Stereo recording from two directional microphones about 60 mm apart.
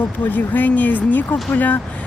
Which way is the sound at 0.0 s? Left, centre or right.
Left.